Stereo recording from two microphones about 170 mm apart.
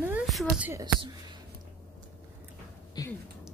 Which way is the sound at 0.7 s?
25° right (ahead or behind).